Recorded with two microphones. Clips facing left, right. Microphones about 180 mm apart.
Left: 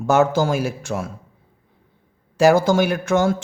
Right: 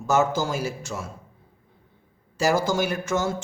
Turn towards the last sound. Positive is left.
turn(degrees=60)  # may be behind; listen again after turning